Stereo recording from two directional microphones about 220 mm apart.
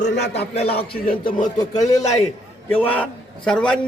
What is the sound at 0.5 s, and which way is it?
Speech, 25° left (ahead or behind).